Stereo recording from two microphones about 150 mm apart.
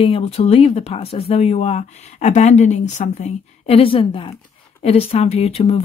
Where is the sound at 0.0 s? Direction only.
40° left (ahead or behind).